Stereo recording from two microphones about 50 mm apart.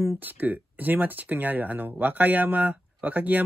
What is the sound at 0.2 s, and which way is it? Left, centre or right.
Speech, right.